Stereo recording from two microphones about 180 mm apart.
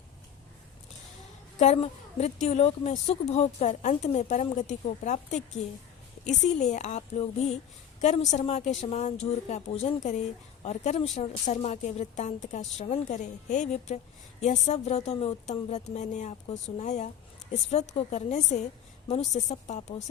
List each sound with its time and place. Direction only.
1.5 s a woman's voice: 40° left (ahead or behind)